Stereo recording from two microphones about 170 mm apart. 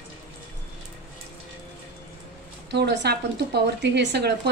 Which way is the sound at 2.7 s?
85° right.